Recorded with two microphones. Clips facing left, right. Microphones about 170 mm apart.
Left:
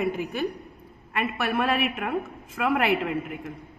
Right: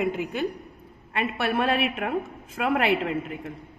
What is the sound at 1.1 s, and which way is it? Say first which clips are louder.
A woman's voice: right 1 dB; 30° right (ahead or behind).